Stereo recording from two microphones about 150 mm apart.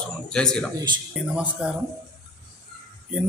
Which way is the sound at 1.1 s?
5° right (ahead or behind).